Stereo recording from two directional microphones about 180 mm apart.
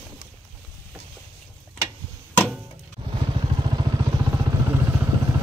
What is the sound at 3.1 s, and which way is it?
Vehicle, 25° right (ahead or behind).